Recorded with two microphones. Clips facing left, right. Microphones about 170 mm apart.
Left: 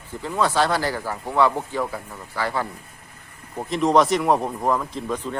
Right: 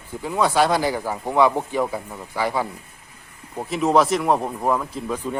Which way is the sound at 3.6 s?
5° right (ahead or behind).